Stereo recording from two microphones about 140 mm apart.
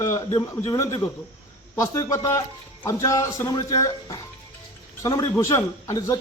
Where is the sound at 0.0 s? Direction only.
25° left (ahead or behind).